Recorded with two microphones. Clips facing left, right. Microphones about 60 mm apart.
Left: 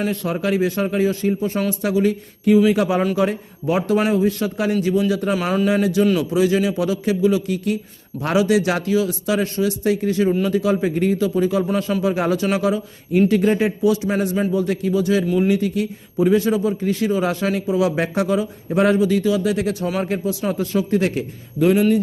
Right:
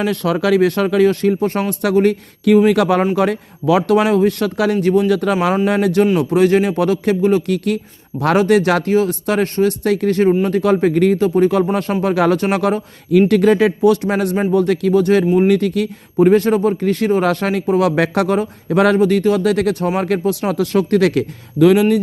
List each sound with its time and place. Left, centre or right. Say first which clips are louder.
0.0 s a man's voice: right 5 dB; right
11.2 s a man's voice: right 5 dB; right
12.0 s a man's voice: right 7 dB; right